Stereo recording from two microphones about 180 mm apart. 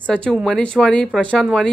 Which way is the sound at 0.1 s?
5° left (ahead or behind).